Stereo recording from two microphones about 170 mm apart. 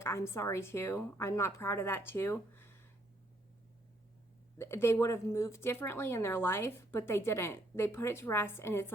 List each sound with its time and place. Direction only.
0.0 s a woman's voice: 15° left (ahead or behind)
4.5 s a woman's voice: 15° left (ahead or behind)